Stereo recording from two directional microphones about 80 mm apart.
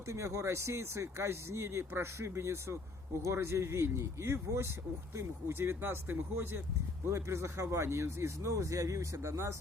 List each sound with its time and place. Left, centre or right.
0.1 s speech: right